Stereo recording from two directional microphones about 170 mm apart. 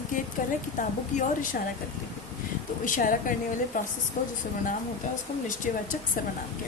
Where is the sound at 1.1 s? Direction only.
50° left (ahead or behind).